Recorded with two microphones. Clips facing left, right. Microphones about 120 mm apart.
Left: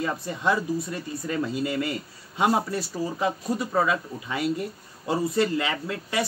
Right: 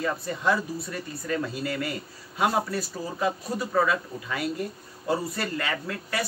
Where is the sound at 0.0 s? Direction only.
25° left (ahead or behind).